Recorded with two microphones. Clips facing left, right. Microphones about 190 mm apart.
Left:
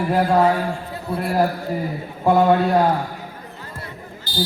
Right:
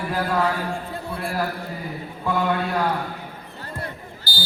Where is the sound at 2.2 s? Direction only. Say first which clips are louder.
Left 8 dB; 40° left (ahead or behind).